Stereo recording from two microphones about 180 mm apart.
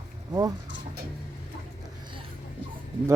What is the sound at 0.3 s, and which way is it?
Speech, 20° right (ahead or behind).